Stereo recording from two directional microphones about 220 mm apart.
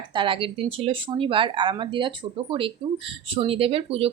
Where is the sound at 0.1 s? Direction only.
20° right (ahead or behind).